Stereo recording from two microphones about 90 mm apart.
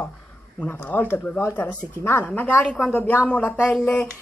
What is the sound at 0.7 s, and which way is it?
Speech, 20° left (ahead or behind).